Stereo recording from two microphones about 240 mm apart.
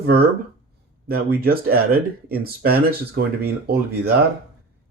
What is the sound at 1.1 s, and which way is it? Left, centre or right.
Speech, right.